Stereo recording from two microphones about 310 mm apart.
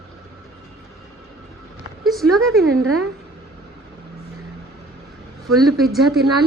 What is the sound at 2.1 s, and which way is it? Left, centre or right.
Speech, centre.